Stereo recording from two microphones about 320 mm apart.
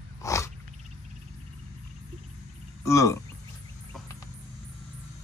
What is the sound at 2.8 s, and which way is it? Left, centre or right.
Speech, centre.